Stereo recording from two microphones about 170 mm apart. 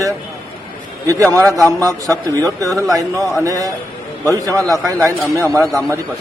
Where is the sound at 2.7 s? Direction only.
Centre (ahead or behind).